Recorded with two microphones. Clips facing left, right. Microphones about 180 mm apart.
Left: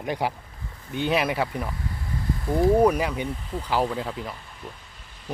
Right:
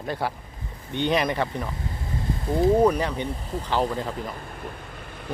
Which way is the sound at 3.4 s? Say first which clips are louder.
Right 1 dB; 40° right (ahead or behind).